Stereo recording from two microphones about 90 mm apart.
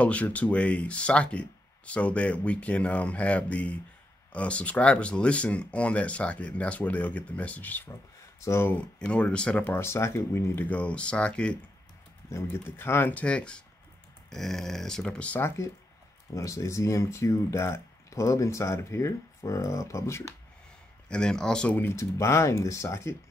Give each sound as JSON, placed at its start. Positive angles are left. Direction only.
{"t": 0.0, "sound": "speech", "side_deg": 15}
{"t": 9.0, "sound": "speech", "side_deg": 10}
{"t": 9.8, "sound": "speech", "side_deg": 30}
{"t": 12.3, "sound": "speech", "side_deg": 30}
{"t": 13.1, "sound": "speech", "side_deg": 10}
{"t": 15.4, "sound": "speech", "side_deg": 35}
{"t": 21.1, "sound": "speech", "side_deg": 10}
{"t": 21.9, "sound": "speech", "side_deg": 35}